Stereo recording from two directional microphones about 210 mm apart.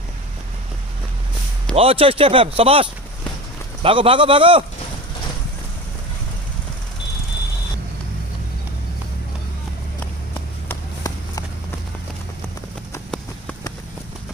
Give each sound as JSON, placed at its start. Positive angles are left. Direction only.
{"t": 1.8, "sound": "speech", "side_deg": -25}
{"t": 10.3, "sound": "run", "side_deg": 15}